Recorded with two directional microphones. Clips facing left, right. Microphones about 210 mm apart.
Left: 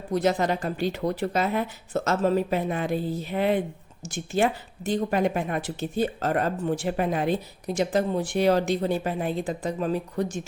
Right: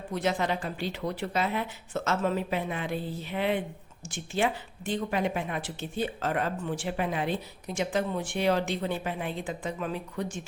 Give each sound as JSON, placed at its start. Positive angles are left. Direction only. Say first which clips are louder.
{"t": 0.1, "sound": "speech", "louder": "left 5 dB", "side_deg": 40}